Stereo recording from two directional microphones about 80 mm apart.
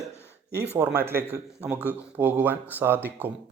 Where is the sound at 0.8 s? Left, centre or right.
Right.